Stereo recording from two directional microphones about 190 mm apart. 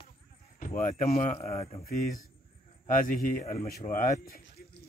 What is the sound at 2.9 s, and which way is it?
A man's voice, 45° left (ahead or behind).